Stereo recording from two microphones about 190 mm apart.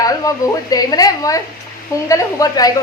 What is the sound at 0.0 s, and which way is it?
Speech, 20° left (ahead or behind).